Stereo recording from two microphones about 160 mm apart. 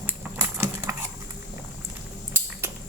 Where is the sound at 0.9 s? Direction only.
15° right (ahead or behind).